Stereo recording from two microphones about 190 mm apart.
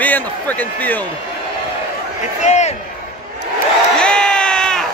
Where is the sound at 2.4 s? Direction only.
35° left (ahead or behind).